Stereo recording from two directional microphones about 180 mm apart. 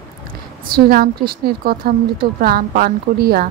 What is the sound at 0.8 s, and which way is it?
A woman's voice, 55° right (ahead or behind).